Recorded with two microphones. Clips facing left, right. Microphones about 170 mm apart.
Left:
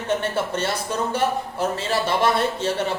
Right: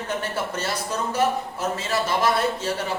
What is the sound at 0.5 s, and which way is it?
A man's voice, 30° left (ahead or behind).